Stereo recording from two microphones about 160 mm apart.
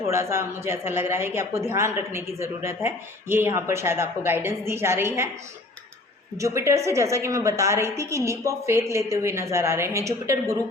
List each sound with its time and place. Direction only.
0.1 s a woman's voice: 15° right (ahead or behind)
6.3 s a woman's voice: 20° right (ahead or behind)